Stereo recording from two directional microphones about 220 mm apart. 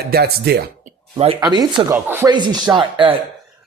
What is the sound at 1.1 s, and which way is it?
Speech, 25° right (ahead or behind).